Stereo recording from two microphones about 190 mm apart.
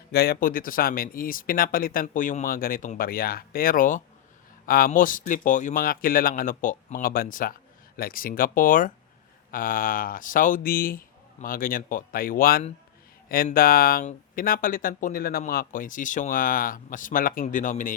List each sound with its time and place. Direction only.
0.1 s speech: 55° left (ahead or behind)